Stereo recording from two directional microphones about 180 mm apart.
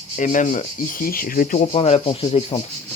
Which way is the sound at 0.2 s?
45° left (ahead or behind).